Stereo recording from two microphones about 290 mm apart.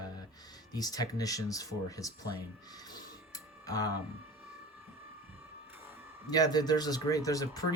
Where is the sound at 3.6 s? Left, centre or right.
Centre.